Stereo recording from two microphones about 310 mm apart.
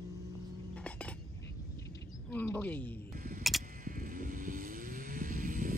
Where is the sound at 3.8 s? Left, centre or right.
Right.